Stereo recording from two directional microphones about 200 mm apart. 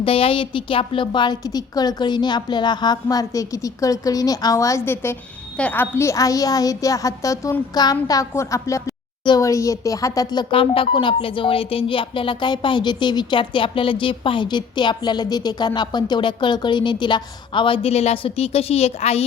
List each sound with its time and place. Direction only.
0.0 s a woman's voice: 25° left (ahead or behind)